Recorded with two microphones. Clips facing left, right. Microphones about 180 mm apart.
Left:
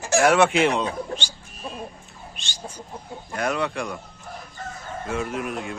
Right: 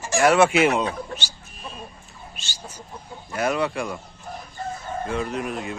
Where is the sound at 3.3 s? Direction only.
Centre (ahead or behind).